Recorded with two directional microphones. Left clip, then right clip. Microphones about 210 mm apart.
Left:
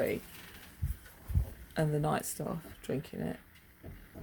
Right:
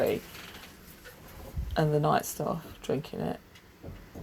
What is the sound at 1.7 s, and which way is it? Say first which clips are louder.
Speech: right 7 dB; 20° left (ahead or behind).